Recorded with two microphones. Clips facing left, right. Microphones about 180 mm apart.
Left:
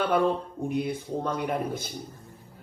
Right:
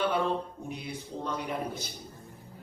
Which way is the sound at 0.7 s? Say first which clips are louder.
Left 12 dB; 50° left (ahead or behind).